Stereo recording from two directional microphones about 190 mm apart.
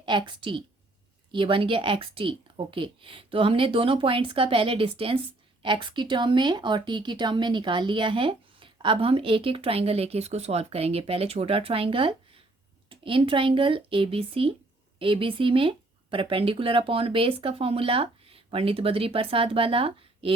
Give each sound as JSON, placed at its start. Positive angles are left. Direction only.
{"t": 0.0, "sound": "a woman's voice", "side_deg": -25}